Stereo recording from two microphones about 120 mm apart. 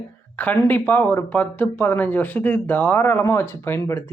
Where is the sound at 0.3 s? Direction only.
15° left (ahead or behind).